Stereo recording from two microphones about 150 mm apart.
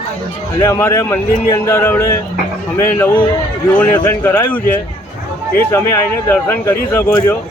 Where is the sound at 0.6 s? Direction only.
20° left (ahead or behind).